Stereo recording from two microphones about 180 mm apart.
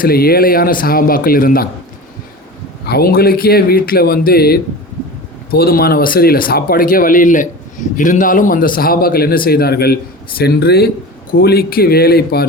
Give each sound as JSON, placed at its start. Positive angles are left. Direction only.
{"t": 0.0, "sound": "speech", "side_deg": 55}
{"t": 2.8, "sound": "a man's voice", "side_deg": 60}